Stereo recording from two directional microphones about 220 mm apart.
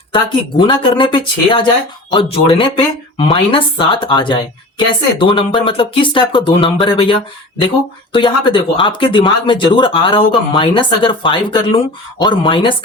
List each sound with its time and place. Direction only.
0.1 s speech: 20° left (ahead or behind)